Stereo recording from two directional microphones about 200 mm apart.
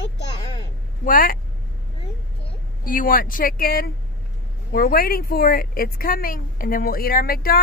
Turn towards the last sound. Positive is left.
turn(degrees=50)  # may be behind; listen again after turning